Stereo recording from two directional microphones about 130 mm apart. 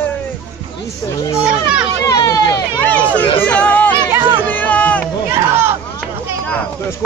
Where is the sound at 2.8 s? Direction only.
10° left (ahead or behind).